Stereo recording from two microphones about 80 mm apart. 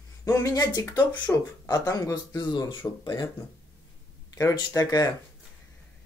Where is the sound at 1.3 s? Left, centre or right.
Left.